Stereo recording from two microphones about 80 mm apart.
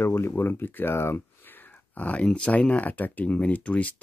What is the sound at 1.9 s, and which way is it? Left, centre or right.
Speech, centre.